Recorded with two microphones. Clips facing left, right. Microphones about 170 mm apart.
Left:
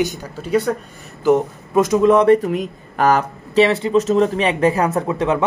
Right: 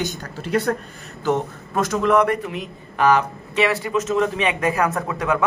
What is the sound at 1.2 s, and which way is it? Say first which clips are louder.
Speech: left 6 dB; 15° left (ahead or behind).